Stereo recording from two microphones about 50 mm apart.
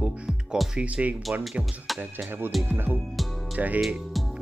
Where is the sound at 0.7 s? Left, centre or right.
Right.